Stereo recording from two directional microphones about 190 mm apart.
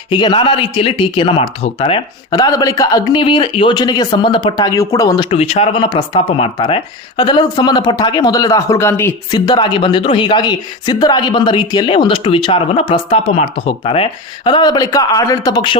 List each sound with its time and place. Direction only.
0.1 s a man's voice: 25° left (ahead or behind)
9.5 s a man's voice: 25° left (ahead or behind)